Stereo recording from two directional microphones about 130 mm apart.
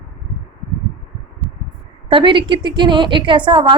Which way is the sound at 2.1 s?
40° right (ahead or behind).